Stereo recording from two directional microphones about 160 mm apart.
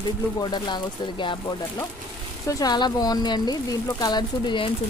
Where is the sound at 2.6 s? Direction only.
25° left (ahead or behind).